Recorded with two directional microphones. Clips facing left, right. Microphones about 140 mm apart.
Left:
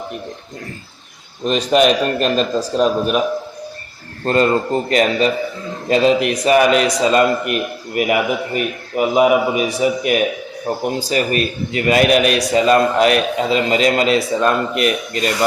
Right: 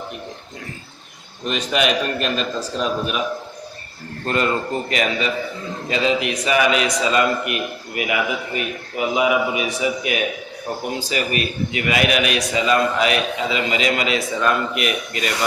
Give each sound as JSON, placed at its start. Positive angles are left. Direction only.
{"t": 1.5, "sound": "a man's voice", "side_deg": 35}
{"t": 4.3, "sound": "a man's voice", "side_deg": 35}